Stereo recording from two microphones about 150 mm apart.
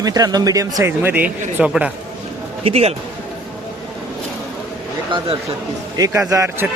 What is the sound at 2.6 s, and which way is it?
Speech, 40° right (ahead or behind).